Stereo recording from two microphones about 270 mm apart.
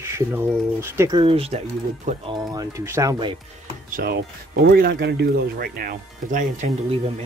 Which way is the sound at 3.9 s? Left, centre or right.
Right.